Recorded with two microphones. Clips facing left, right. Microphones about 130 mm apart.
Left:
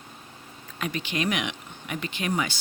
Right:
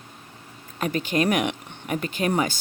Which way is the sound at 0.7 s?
45° right (ahead or behind).